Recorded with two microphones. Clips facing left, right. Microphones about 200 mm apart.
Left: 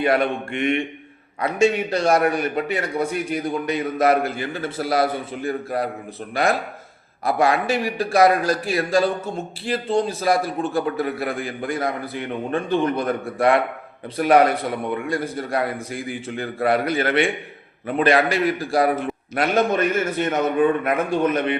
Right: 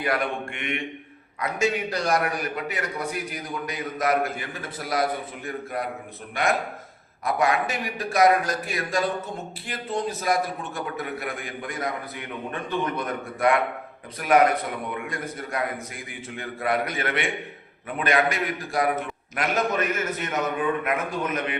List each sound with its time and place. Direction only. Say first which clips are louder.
0.0 s a man's voice: left 6 dB; 25° left (ahead or behind)